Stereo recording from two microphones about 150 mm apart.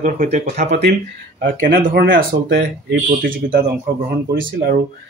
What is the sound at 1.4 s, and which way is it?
Speech, 65° right (ahead or behind).